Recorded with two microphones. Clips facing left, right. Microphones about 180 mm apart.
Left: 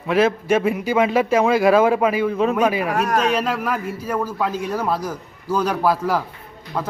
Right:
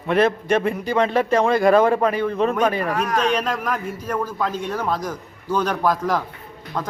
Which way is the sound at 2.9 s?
45° left (ahead or behind).